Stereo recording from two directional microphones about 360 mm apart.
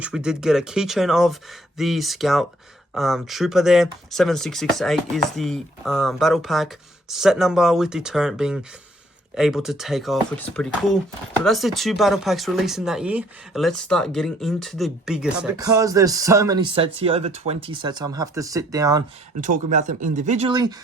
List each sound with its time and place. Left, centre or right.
0.0 s speech: centre
19.4 s speech: right